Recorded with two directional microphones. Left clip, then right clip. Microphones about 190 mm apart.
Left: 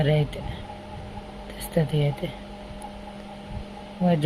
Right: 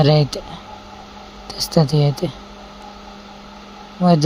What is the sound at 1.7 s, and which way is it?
Speech, 45° right (ahead or behind).